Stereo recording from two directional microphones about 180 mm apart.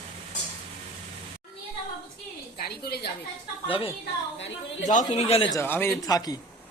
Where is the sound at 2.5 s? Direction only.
60° left (ahead or behind).